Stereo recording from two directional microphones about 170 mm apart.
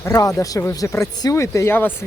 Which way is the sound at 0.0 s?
20° left (ahead or behind).